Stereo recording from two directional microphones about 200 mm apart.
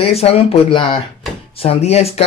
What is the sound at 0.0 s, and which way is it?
Speech, 30° left (ahead or behind).